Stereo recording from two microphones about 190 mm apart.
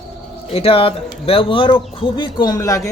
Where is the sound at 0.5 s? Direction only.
30° left (ahead or behind).